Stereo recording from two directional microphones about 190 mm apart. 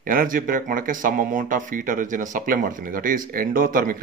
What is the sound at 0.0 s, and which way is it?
Speech, 45° right (ahead or behind).